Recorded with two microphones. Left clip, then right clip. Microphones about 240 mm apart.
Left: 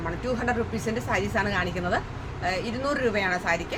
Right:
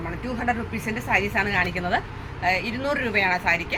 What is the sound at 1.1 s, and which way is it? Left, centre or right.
A woman's voice, centre.